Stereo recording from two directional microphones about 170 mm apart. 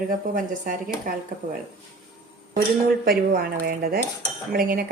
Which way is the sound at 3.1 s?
65° right (ahead or behind).